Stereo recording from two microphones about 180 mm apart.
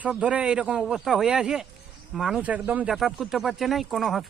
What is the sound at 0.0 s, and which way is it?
A man's voice, 5° right (ahead or behind).